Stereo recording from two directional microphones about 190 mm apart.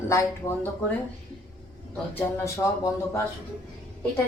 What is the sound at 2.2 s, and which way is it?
A woman's voice, 15° left (ahead or behind).